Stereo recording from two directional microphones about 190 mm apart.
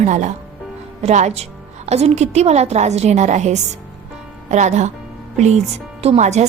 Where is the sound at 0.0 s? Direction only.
40° right (ahead or behind).